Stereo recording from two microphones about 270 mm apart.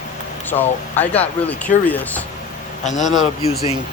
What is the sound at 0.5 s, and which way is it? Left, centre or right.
Speech, centre.